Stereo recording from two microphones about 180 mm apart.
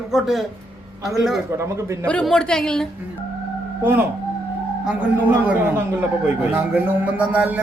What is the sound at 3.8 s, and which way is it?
A man's voice, 10° right (ahead or behind).